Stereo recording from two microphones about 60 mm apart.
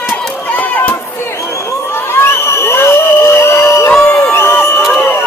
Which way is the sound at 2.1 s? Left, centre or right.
Left.